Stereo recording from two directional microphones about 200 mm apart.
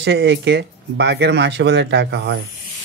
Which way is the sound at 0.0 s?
60° right (ahead or behind).